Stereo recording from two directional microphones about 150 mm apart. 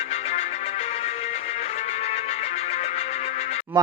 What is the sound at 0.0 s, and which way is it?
Music, 45° left (ahead or behind).